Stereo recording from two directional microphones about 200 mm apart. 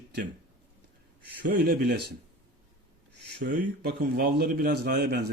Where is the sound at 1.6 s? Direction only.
50° right (ahead or behind).